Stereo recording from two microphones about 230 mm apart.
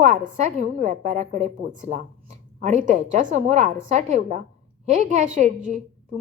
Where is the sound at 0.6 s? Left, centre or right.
Right.